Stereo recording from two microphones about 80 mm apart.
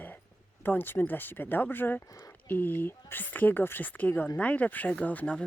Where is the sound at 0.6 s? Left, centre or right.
Left.